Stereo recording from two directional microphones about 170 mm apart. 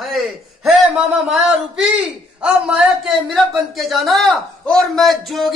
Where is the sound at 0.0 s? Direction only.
Centre (ahead or behind).